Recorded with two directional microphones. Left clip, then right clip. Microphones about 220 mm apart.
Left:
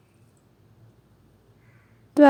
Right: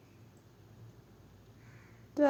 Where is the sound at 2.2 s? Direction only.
45° left (ahead or behind).